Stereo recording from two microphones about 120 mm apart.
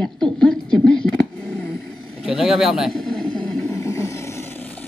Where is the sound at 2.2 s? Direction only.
5° right (ahead or behind).